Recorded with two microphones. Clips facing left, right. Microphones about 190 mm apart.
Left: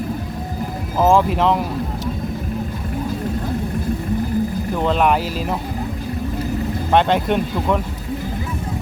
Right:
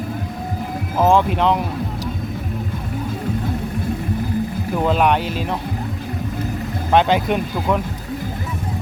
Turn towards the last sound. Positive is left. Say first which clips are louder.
# left 1 dB
turn(degrees=0)  # may be behind; listen again after turning